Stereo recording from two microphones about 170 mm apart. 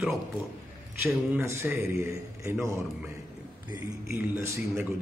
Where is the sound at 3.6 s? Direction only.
10° right (ahead or behind).